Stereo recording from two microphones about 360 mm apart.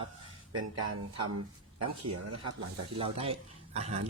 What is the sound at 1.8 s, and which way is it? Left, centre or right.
Speech, right.